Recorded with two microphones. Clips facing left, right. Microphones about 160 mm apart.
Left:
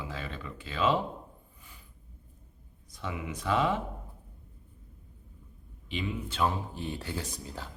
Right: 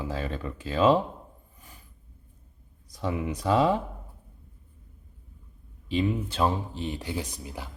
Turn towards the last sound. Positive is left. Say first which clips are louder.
# right 3 dB
turn(degrees=-15)  # may be behind; listen again after turning